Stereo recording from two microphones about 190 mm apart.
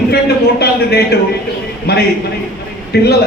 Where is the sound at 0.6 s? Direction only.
60° left (ahead or behind).